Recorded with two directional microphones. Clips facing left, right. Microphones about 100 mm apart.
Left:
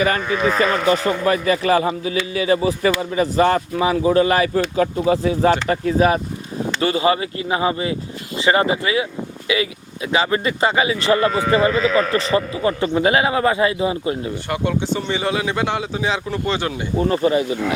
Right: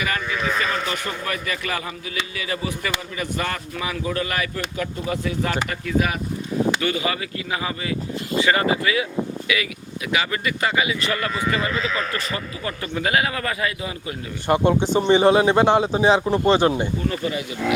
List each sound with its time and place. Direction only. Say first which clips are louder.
0.0 s a man's voice: left 7 dB; 35° left (ahead or behind)
14.5 s speech: right 4 dB; 25° right (ahead or behind)
17.0 s speech: left 8 dB; 35° left (ahead or behind)